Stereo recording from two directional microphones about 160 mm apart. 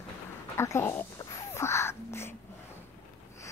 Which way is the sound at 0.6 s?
15° left (ahead or behind).